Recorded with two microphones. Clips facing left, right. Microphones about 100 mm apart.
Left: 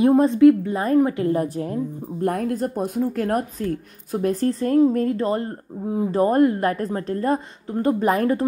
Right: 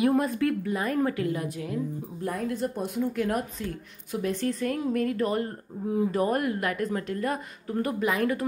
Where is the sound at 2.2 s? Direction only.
60° left (ahead or behind).